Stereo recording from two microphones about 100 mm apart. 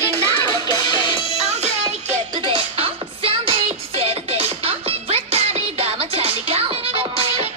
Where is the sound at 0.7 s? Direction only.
45° left (ahead or behind).